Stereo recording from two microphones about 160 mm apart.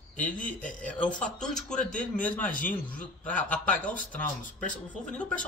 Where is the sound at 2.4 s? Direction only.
55° left (ahead or behind).